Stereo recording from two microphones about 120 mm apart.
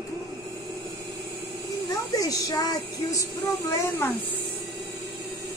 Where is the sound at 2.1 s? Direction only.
30° left (ahead or behind).